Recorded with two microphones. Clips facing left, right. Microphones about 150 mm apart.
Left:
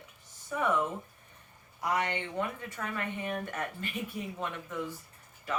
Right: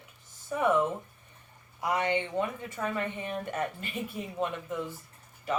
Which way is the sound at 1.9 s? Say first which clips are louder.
Right 5 dB; 20° right (ahead or behind).